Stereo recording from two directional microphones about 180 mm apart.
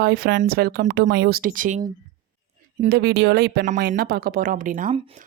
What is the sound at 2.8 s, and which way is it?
A woman's voice, 65° right (ahead or behind).